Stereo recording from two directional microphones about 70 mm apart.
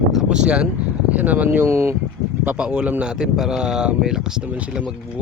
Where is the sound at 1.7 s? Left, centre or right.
Right.